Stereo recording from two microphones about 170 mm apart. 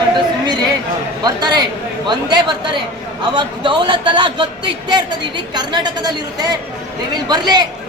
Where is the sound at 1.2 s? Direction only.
25° right (ahead or behind).